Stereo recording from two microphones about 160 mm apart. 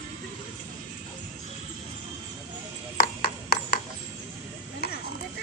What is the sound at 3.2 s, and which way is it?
Ping, 70° left (ahead or behind).